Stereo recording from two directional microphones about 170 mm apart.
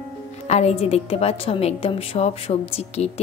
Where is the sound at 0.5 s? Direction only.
40° left (ahead or behind).